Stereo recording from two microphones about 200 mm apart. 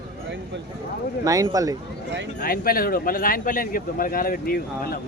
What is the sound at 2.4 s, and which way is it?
Speech, 45° left (ahead or behind).